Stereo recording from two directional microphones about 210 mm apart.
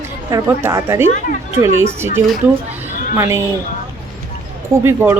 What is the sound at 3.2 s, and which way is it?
Speech, 15° right (ahead or behind).